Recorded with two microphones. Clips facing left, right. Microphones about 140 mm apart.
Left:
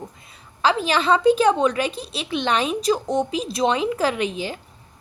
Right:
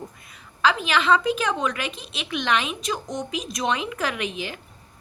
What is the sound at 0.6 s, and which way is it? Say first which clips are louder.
A woman's voice: left 2 dB; 35° left (ahead or behind).